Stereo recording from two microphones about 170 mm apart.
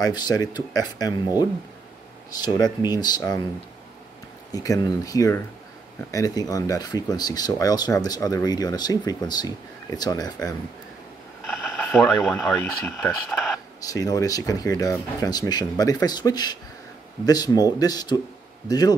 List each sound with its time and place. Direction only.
0.0 s speech: 25° left (ahead or behind)
2.4 s speech: 25° left (ahead or behind)
4.5 s speech: 20° left (ahead or behind)
11.5 s a sound: centre (ahead or behind)
12.9 s speech: 5° left (ahead or behind)
13.7 s speech: 20° left (ahead or behind)